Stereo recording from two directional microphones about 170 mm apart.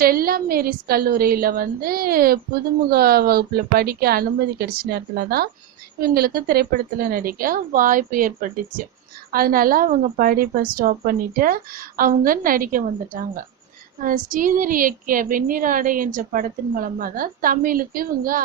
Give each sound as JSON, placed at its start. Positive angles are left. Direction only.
{"t": 0.0, "sound": "a woman's voice", "side_deg": -60}